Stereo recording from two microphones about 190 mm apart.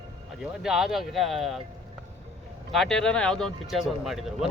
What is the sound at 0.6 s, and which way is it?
Speech, centre (ahead or behind).